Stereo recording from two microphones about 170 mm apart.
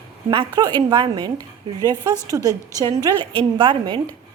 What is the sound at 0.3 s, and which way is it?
A woman's voice, 25° right (ahead or behind).